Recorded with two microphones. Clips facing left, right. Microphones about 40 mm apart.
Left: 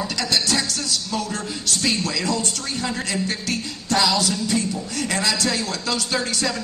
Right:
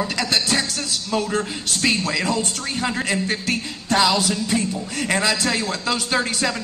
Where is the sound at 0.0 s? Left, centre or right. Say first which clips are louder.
Right 1 dB; right.